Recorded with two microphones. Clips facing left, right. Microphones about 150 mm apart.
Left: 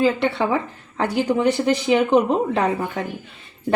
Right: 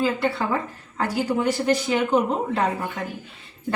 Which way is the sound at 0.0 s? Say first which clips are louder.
Left 4 dB; 70° left (ahead or behind).